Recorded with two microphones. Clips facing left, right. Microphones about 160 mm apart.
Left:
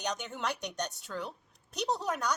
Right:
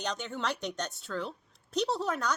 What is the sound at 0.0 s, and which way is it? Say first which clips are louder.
A woman's voice: right 1 dB; 15° left (ahead or behind).